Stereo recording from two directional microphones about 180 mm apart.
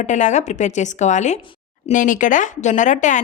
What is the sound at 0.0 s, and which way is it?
Speech, 40° left (ahead or behind).